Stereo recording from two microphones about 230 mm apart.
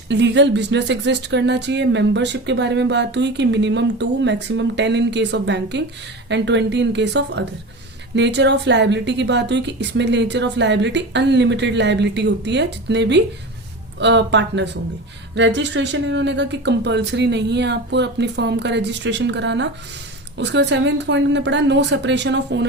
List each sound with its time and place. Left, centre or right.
0.1 s speech: right